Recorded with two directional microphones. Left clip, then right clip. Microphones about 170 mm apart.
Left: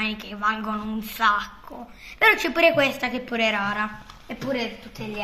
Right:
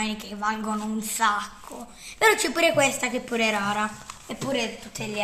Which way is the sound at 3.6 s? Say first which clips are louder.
Even; 50° right (ahead or behind).